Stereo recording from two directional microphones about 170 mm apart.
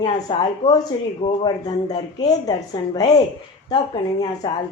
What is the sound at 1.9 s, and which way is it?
A woman's voice, 25° left (ahead or behind).